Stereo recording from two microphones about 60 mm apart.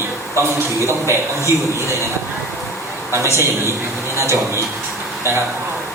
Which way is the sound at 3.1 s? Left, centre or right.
Right.